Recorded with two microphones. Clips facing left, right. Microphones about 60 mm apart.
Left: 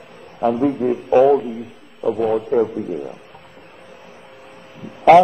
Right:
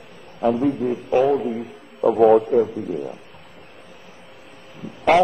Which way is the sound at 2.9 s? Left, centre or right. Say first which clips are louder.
Left 1 dB; left.